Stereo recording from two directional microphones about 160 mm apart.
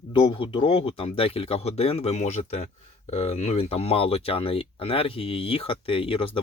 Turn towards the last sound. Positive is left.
turn(degrees=35)  # may be behind; listen again after turning